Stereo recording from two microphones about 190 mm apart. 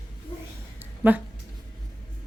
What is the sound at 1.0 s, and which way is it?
Speech, 10° right (ahead or behind).